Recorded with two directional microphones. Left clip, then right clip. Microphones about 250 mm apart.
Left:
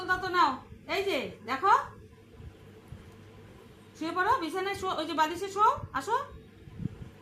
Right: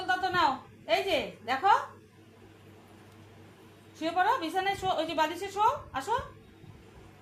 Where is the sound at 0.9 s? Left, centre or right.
Centre.